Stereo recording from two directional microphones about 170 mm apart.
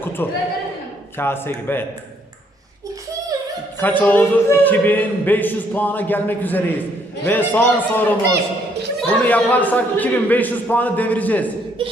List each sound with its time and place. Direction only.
0.2 s a man's voice: 10° left (ahead or behind)
3.8 s a man's voice: 10° left (ahead or behind)
11.8 s a sound: 30° right (ahead or behind)